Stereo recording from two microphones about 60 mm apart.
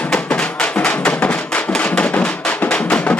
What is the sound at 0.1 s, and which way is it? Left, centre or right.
Music, centre.